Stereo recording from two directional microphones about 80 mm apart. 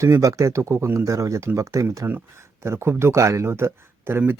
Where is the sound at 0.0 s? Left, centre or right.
Right.